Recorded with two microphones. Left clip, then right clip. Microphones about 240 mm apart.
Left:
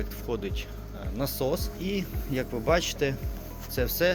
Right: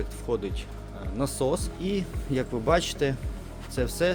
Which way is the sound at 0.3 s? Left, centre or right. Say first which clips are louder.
Right 3 dB; centre.